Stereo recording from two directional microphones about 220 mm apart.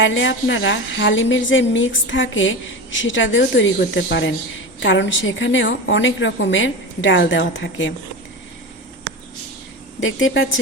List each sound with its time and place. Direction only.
0.0 s a woman's voice: 55° left (ahead or behind)
10.0 s a woman's voice: 60° left (ahead or behind)